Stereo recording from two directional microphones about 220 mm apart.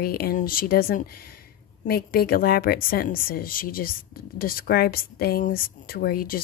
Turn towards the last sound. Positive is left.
turn(degrees=40)  # may be behind; listen again after turning